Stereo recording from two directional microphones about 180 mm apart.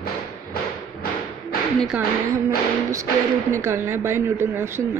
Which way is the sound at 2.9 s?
15° right (ahead or behind).